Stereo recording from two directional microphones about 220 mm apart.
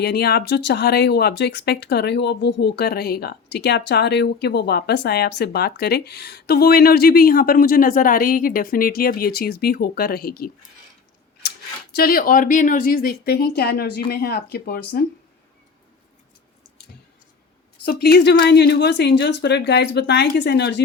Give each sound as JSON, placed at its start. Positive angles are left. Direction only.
{"t": 0.0, "sound": "speech", "side_deg": 45}
{"t": 11.9, "sound": "speech", "side_deg": 40}
{"t": 17.8, "sound": "speech", "side_deg": 50}